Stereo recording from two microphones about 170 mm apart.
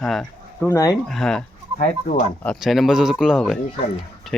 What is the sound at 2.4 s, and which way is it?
A man's voice, centre (ahead or behind).